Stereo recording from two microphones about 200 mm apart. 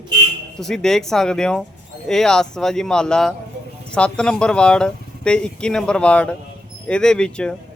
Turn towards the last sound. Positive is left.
turn(degrees=5)  # may be behind; listen again after turning